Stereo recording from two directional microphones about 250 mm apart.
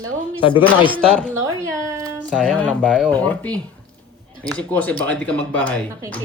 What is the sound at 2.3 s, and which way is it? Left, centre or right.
Speech, centre.